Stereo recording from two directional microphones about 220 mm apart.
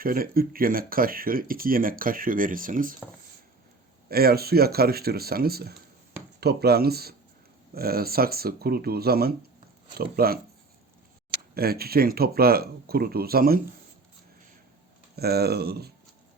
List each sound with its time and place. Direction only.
0.0 s speech: 40° right (ahead or behind)
4.1 s speech: 45° right (ahead or behind)
11.5 s speech: 45° right (ahead or behind)
15.1 s speech: 45° right (ahead or behind)